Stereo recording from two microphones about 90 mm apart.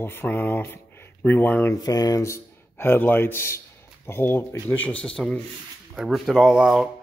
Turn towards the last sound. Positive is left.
turn(degrees=-5)  # may be behind; listen again after turning